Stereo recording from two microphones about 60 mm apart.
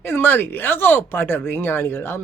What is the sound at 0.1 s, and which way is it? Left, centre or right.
A man's voice, left.